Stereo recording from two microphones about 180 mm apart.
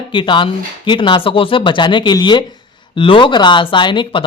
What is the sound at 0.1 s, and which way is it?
A man's voice, 25° left (ahead or behind).